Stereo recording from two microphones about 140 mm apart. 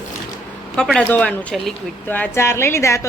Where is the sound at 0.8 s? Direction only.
5° left (ahead or behind); by 3.1 s 20° left (ahead or behind).